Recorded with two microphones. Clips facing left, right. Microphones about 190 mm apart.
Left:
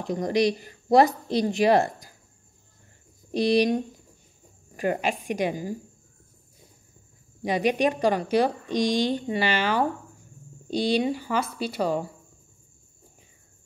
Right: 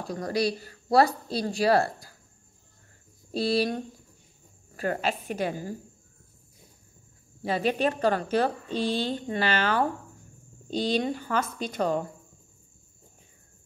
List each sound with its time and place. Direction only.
0.0 s speech: 20° left (ahead or behind)
3.3 s a woman's voice: 15° left (ahead or behind)
7.4 s a woman's voice: 15° left (ahead or behind)